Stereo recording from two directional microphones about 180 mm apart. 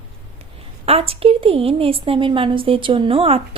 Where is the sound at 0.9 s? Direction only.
30° right (ahead or behind).